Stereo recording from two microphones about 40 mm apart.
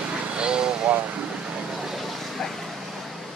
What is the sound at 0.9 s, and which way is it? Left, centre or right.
Air conditioning, right.